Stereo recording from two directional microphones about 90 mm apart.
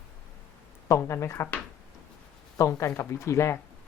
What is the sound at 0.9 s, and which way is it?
Speech, 30° left (ahead or behind).